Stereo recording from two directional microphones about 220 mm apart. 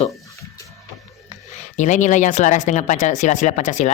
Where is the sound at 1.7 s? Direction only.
35° left (ahead or behind).